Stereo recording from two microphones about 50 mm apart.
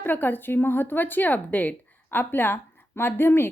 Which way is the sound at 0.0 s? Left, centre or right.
Left.